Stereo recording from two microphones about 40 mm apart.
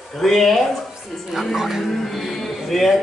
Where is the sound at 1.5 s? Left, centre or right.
Centre.